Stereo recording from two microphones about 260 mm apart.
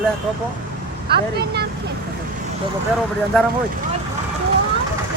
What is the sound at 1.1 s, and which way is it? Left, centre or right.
Speech, right.